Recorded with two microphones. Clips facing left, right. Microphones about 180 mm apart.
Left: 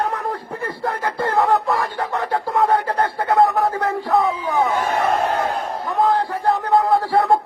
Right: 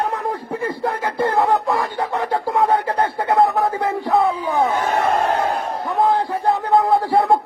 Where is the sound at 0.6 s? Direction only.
15° right (ahead or behind).